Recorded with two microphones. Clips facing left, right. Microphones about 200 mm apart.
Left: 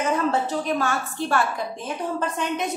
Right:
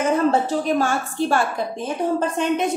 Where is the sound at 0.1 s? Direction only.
30° right (ahead or behind).